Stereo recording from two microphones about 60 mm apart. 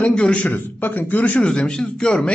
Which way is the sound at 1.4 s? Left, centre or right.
Centre.